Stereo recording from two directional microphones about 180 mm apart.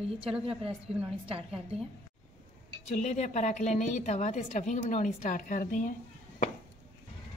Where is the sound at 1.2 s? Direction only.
30° right (ahead or behind).